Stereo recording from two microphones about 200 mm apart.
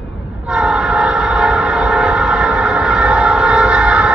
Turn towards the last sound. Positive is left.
turn(degrees=-5)  # may be behind; listen again after turning